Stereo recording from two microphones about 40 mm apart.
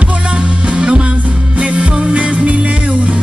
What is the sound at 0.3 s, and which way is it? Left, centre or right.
Music, right.